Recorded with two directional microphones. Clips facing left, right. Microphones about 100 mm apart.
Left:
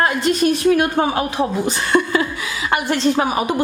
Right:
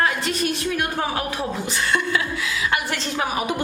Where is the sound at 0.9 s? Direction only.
25° left (ahead or behind).